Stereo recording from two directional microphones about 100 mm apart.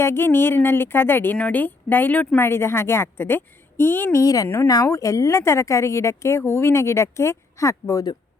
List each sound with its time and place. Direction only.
0.0 s speech: 25° left (ahead or behind)
4.2 s a woman's voice: 35° left (ahead or behind)
4.4 s speech: 25° left (ahead or behind)
4.7 s speech: 35° left (ahead or behind)